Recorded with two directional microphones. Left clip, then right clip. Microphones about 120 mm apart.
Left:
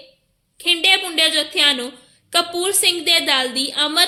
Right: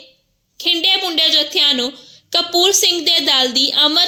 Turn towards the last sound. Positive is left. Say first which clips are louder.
# right 4 dB
turn(degrees=-30)  # may be behind; listen again after turning